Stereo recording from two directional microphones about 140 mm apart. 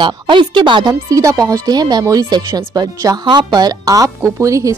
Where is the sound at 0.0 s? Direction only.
35° right (ahead or behind).